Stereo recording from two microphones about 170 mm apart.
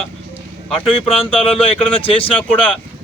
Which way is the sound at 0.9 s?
35° left (ahead or behind).